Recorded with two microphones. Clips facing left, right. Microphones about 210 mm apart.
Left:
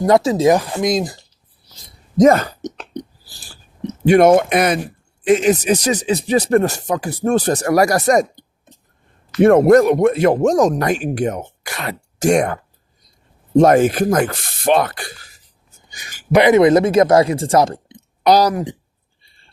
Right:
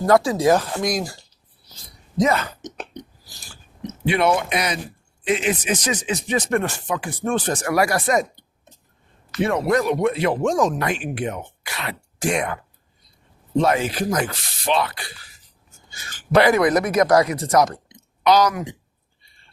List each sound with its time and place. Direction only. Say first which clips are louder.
0.0 s speech: left 4 dB; 20° left (ahead or behind)
2.1 s a sound: left 9 dB; 45° left (ahead or behind)
4.0 s speech: left 9 dB; 45° left (ahead or behind)
13.6 s speech: left 8 dB; 50° left (ahead or behind)
15.9 s speech: left 3 dB; 15° left (ahead or behind); by 18.8 s 35° left (ahead or behind)